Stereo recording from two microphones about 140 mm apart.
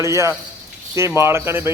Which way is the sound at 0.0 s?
20° right (ahead or behind).